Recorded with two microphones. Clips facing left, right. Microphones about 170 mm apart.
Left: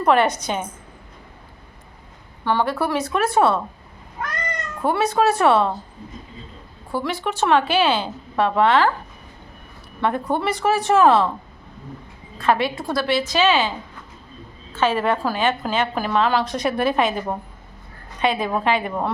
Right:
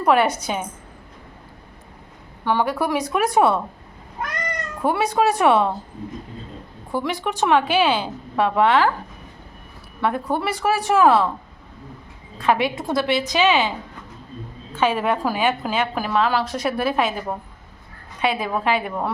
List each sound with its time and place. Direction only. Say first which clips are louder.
0.0 s a woman's voice: even; 10° right (ahead or behind)
2.4 s a woman's voice: even; 10° right (ahead or behind)
4.8 s a woman's voice: left 1 dB; 10° right (ahead or behind)
6.9 s a woman's voice: even; 15° right (ahead or behind)
10.0 s a woman's voice: left 1 dB; 5° right (ahead or behind)
12.4 s a woman's voice: even; 15° right (ahead or behind)